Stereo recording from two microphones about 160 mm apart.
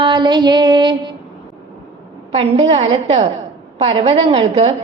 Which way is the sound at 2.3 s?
40° right (ahead or behind).